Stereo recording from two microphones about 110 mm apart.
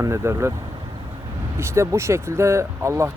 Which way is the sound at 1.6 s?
25° right (ahead or behind).